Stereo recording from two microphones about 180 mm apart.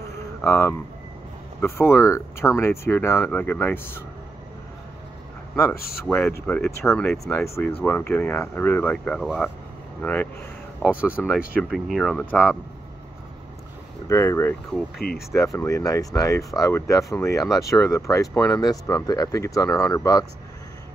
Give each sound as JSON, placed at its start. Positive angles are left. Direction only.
{"t": 0.4, "sound": "speech", "side_deg": 15}
{"t": 6.0, "sound": "speech", "side_deg": 5}
{"t": 10.8, "sound": "speech", "side_deg": -5}
{"t": 14.0, "sound": "speech", "side_deg": 15}
{"t": 15.0, "sound": "speech", "side_deg": 55}
{"t": 15.3, "sound": "speech", "side_deg": 15}